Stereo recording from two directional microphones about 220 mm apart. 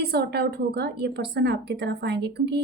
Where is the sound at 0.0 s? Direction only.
45° right (ahead or behind).